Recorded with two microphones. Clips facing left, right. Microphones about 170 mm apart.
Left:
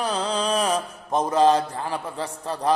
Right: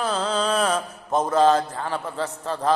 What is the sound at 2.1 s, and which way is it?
Speech, 35° left (ahead or behind).